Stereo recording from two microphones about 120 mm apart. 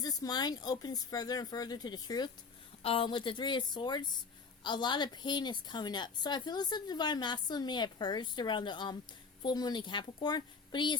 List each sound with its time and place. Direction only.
0.0 s a woman's voice: 30° left (ahead or behind)
2.8 s a woman's voice: 50° left (ahead or behind)